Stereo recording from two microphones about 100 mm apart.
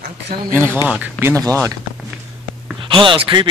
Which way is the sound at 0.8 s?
10° right (ahead or behind).